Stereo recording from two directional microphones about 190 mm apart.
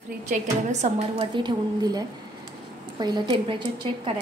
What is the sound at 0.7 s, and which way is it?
Speech, 35° right (ahead or behind).